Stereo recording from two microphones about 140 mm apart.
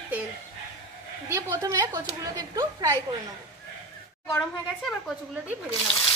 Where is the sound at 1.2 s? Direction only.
20° right (ahead or behind).